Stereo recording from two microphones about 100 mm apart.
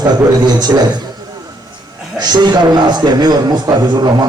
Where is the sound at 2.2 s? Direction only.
45° right (ahead or behind).